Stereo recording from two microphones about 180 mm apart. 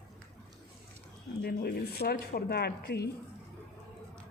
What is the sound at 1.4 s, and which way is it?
Speech, 60° left (ahead or behind).